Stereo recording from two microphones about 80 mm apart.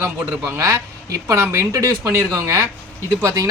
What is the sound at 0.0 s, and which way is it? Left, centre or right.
Speech, right.